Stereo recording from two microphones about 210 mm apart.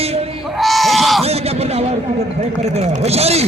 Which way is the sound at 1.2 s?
30° right (ahead or behind).